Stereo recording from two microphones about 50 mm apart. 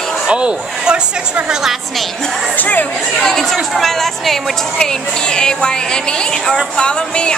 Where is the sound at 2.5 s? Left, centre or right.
Left.